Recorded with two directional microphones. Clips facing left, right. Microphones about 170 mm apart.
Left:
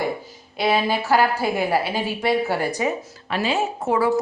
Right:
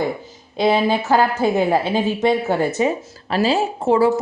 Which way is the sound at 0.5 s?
20° right (ahead or behind).